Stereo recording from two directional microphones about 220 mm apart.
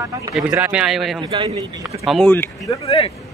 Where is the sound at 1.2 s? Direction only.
20° right (ahead or behind).